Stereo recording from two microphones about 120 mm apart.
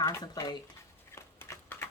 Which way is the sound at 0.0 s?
30° left (ahead or behind).